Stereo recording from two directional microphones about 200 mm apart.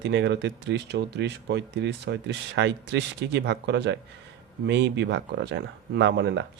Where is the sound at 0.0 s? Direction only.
60° right (ahead or behind).